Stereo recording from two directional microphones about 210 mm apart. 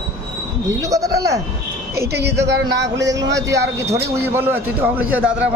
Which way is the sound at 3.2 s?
15° right (ahead or behind).